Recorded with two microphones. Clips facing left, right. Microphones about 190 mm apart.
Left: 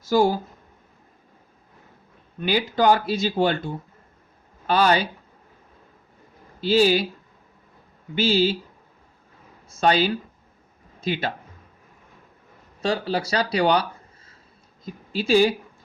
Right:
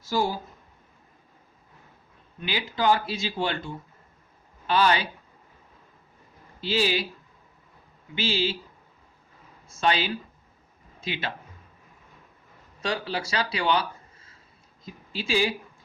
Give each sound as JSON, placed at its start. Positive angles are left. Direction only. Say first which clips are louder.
{"t": 0.0, "sound": "speech", "louder": "left 7 dB", "side_deg": 45}
{"t": 2.4, "sound": "speech", "louder": "left 6 dB", "side_deg": 45}
{"t": 6.6, "sound": "speech", "louder": "left 7 dB", "side_deg": 45}
{"t": 8.1, "sound": "speech", "louder": "left 7 dB", "side_deg": 40}
{"t": 9.6, "sound": "speech", "louder": "left 5 dB", "side_deg": 40}
{"t": 12.8, "sound": "speech", "louder": "left 5 dB", "side_deg": 35}
{"t": 15.1, "sound": "speech", "louder": "left 8 dB", "side_deg": 45}